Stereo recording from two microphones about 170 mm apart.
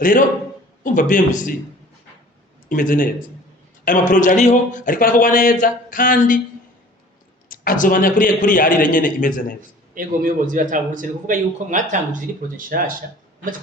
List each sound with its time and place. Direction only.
0.0 s a man's voice: 55° left (ahead or behind)
2.6 s a man's voice: 50° left (ahead or behind)
7.4 s a man's voice: 55° left (ahead or behind)
9.9 s a man's voice: 55° right (ahead or behind)